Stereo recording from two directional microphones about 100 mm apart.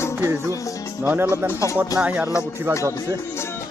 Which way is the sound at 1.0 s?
20° right (ahead or behind).